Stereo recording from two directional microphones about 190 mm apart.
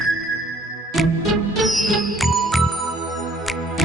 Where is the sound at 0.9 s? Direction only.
Centre (ahead or behind).